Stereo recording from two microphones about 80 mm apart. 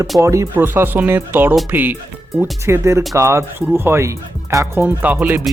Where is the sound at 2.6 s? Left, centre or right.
Right.